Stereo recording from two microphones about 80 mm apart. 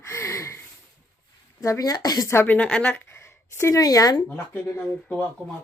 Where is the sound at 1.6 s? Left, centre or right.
Left.